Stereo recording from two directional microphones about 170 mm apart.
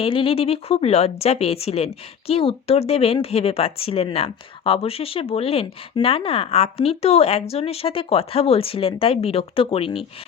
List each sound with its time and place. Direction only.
0.0 s speech: 35° left (ahead or behind)